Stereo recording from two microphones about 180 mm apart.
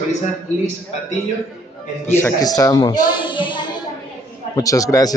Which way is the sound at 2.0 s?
15° left (ahead or behind).